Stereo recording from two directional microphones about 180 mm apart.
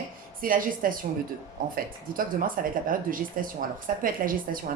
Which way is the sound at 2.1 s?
50° right (ahead or behind).